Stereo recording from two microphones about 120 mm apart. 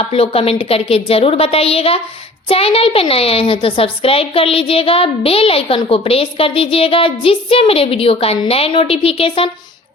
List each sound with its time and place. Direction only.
0.1 s a child's voice: 50° left (ahead or behind)